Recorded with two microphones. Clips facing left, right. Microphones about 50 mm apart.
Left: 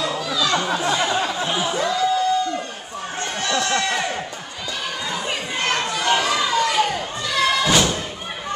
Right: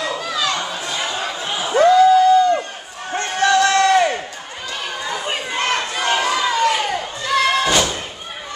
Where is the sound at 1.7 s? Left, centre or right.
Right.